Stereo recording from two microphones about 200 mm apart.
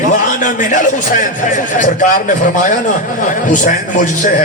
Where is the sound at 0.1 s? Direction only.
40° left (ahead or behind).